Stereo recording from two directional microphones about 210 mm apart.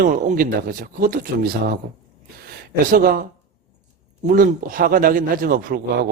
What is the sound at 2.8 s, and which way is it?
Speech, 40° right (ahead or behind).